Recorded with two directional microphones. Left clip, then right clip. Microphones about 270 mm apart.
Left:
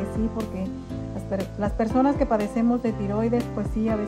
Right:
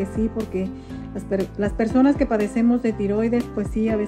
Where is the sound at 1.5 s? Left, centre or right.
Left.